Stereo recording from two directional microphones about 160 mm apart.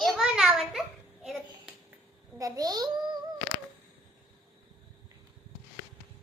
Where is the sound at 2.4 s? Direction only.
20° right (ahead or behind).